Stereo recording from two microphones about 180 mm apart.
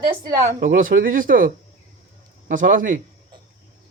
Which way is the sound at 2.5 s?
45° right (ahead or behind).